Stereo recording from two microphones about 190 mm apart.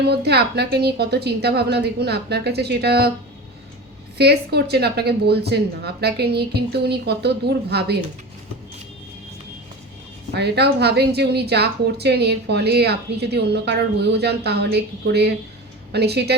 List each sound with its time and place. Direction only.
0.1 s speech: 60° right (ahead or behind)
4.2 s speech: 60° right (ahead or behind)
10.3 s speech: 60° right (ahead or behind)